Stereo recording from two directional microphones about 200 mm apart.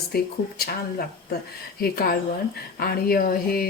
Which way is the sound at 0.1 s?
50° left (ahead or behind).